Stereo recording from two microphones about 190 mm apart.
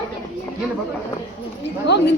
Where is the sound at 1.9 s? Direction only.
65° left (ahead or behind).